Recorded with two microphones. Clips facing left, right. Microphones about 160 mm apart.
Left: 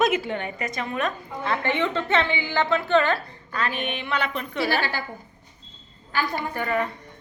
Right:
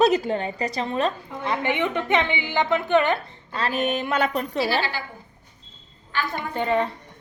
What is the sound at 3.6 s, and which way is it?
A woman's voice, 40° right (ahead or behind).